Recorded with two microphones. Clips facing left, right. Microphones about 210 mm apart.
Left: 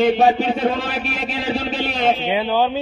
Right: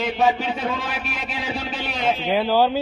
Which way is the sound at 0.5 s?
30° left (ahead or behind).